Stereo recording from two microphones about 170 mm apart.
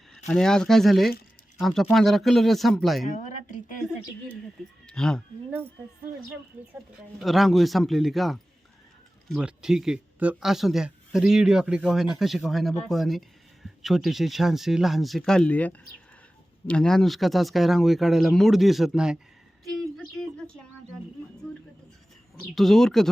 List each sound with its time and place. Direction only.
0.3 s speech: 5° left (ahead or behind)
3.2 s a sound: 45° left (ahead or behind)
4.9 s speech: 5° left (ahead or behind)
7.2 s speech: centre (ahead or behind)
22.5 s speech: centre (ahead or behind)